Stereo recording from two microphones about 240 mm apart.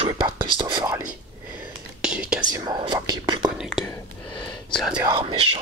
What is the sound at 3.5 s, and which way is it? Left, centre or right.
Speech, centre.